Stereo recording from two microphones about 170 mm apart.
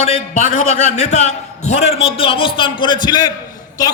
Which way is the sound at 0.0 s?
40° left (ahead or behind).